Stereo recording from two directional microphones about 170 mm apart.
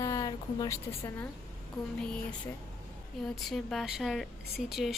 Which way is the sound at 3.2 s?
Centre (ahead or behind).